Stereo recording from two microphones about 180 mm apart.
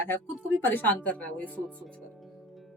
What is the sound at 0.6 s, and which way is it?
Speech, 10° left (ahead or behind).